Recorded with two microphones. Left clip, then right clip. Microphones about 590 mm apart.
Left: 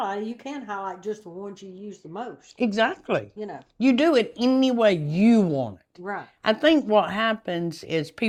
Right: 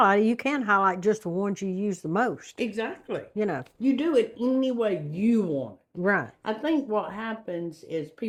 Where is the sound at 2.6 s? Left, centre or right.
Left.